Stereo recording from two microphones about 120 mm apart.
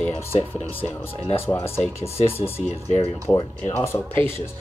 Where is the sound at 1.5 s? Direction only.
20° left (ahead or behind).